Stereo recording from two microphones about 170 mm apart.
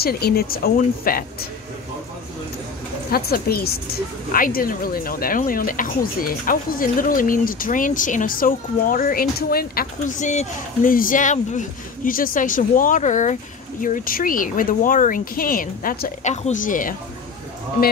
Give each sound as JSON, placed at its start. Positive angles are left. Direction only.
{"t": 0.0, "sound": "a woman's voice", "side_deg": 65}
{"t": 3.1, "sound": "a woman's voice", "side_deg": 65}